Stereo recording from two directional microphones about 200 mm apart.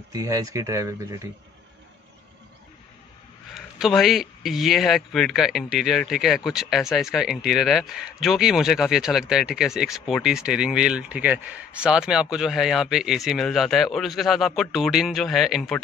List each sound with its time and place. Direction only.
0.1 s speech: 15° right (ahead or behind)
3.5 s speech: centre (ahead or behind)